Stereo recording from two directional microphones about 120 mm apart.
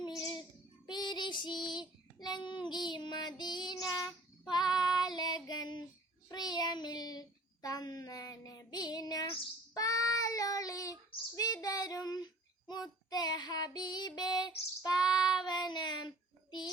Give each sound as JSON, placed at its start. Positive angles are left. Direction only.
{"t": 0.0, "sound": "child singing", "side_deg": 30}